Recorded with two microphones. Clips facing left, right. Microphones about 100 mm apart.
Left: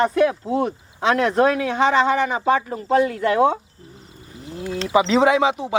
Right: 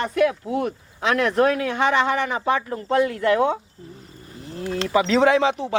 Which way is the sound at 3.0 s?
25° left (ahead or behind).